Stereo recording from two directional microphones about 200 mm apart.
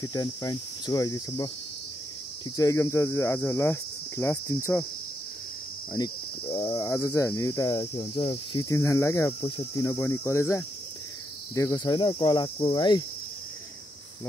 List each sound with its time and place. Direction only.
0.0 s cricket: 20° left (ahead or behind)
2.5 s cricket: 15° left (ahead or behind)
5.9 s cricket: 25° left (ahead or behind)
6.7 s cricket: 15° left (ahead or behind)